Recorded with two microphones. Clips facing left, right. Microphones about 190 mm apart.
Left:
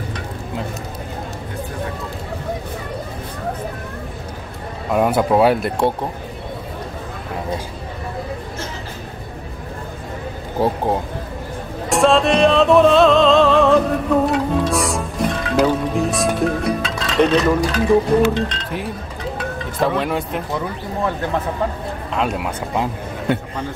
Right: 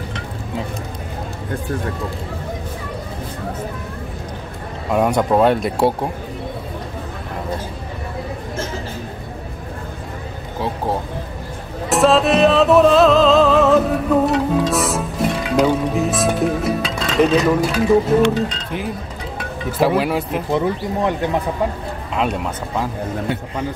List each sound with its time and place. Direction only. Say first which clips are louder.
4.9 s speech: even; centre (ahead or behind)
10.6 s speech: left 6 dB; 45° left (ahead or behind)
11.9 s music: right 1 dB; centre (ahead or behind)
14.7 s speech: right 1 dB; centre (ahead or behind)
20.0 s speech: right 2 dB; 5° right (ahead or behind)
20.5 s speech: right 9 dB; 20° right (ahead or behind)
22.1 s speech: right 1 dB; centre (ahead or behind)